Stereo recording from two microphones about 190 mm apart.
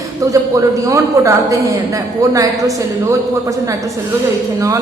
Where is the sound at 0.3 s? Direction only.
15° right (ahead or behind).